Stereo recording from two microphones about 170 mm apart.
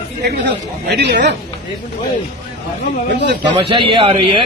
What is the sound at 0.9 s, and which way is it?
Speech, 75° right (ahead or behind).